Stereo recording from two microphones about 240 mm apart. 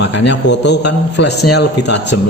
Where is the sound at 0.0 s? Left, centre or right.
Left.